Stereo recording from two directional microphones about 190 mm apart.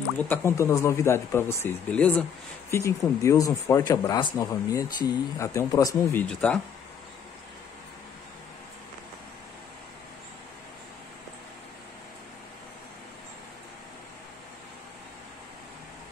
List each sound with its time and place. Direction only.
0.3 s speech: 15° left (ahead or behind)
6.2 s speech: 5° left (ahead or behind)